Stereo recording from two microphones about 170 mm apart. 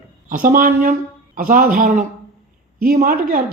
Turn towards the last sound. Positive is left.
turn(degrees=-55)  # may be behind; listen again after turning